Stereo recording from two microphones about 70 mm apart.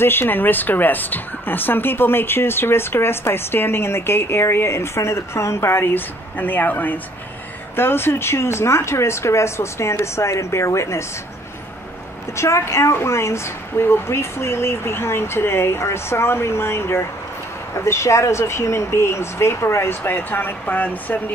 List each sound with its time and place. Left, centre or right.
0.0 s speech: left
12.4 s speech: left
20.0 s speech: left